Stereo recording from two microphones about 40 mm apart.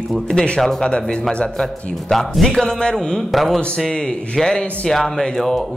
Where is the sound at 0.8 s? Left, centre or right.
Left.